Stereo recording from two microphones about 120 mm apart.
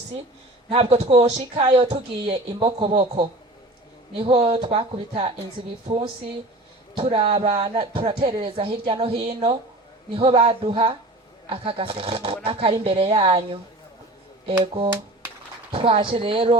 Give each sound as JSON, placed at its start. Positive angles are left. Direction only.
{"t": 0.7, "sound": "a man's voice", "side_deg": -65}
{"t": 1.7, "sound": "speech", "side_deg": -50}
{"t": 6.9, "sound": "speech", "side_deg": -50}
{"t": 7.5, "sound": "speech", "side_deg": -40}
{"t": 15.7, "sound": "speech", "side_deg": -45}